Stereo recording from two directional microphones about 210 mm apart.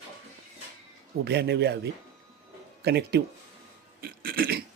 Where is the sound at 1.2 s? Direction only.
50° right (ahead or behind).